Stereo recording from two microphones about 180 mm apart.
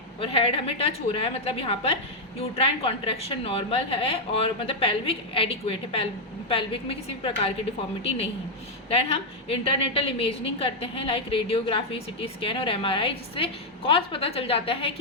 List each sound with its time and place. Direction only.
0.2 s a woman's voice: 30° left (ahead or behind)
8.9 s a woman's voice: 30° left (ahead or behind)